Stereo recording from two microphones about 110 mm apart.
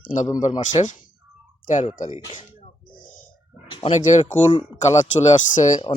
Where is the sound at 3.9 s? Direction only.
90° left.